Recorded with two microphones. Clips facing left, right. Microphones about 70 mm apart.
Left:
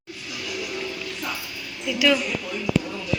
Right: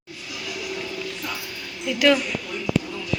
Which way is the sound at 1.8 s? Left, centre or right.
Right.